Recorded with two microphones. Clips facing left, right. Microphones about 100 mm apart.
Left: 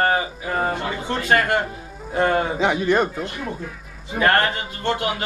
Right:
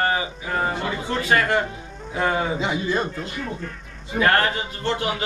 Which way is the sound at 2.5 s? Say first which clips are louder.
Left 5 dB; 70° left (ahead or behind).